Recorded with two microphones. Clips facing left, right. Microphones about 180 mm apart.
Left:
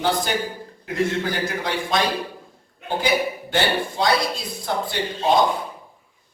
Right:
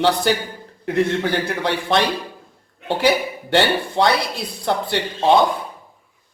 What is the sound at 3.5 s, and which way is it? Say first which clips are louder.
Speech: right 5 dB; 65° right (ahead or behind).